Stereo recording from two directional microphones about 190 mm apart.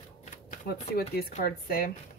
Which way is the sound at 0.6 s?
55° left (ahead or behind).